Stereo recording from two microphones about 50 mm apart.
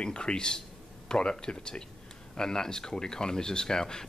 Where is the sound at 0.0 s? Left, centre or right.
Centre.